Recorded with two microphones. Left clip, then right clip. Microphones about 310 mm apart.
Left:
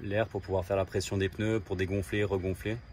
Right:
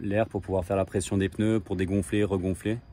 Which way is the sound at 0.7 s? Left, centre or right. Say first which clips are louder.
Right 3 dB; right.